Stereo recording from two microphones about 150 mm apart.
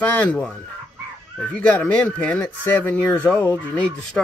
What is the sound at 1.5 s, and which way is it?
Speech, 10° left (ahead or behind).